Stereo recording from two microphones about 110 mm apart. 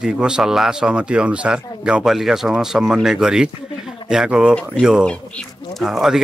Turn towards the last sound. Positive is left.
turn(degrees=-5)  # may be behind; listen again after turning